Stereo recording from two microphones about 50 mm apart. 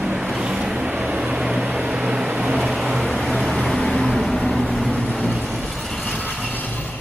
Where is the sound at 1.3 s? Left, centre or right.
Centre.